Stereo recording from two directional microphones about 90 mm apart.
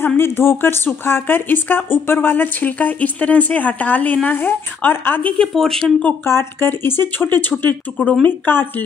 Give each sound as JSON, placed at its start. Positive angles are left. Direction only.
{"t": 0.0, "sound": "a woman's voice", "side_deg": 25}
{"t": 5.4, "sound": "speech", "side_deg": 5}
{"t": 6.2, "sound": "a woman's voice", "side_deg": 25}
{"t": 8.5, "sound": "a woman's voice", "side_deg": 25}